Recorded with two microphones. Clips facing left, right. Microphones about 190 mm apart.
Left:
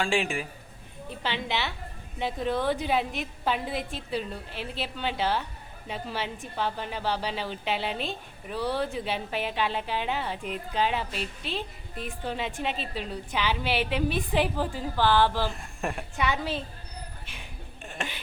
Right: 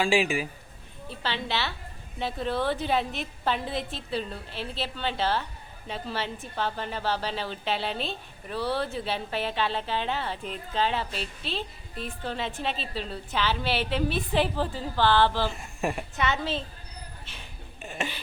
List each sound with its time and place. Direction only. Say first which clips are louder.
0.0 s a man's voice: right 3 dB; 5° right (ahead or behind)
1.2 s a woman's voice: even; 15° left (ahead or behind)
15.4 s speech: right 2 dB; centre (ahead or behind)
16.1 s a woman's voice: even; 10° left (ahead or behind)
17.8 s a man's voice: right 3 dB; centre (ahead or behind)